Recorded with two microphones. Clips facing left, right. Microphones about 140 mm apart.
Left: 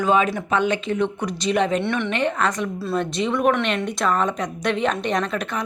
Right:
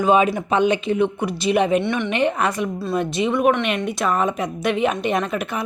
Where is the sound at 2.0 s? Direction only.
15° right (ahead or behind).